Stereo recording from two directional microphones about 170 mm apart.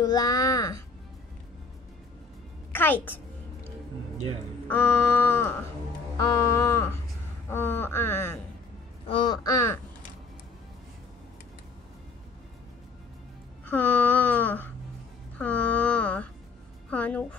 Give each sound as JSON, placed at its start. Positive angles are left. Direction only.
{"t": 0.0, "sound": "speech", "side_deg": 25}
{"t": 2.7, "sound": "a woman's voice", "side_deg": 10}
{"t": 4.6, "sound": "a sound", "side_deg": 15}
{"t": 9.0, "sound": "speech", "side_deg": 30}
{"t": 13.7, "sound": "a sound", "side_deg": 10}
{"t": 16.9, "sound": "speech", "side_deg": 10}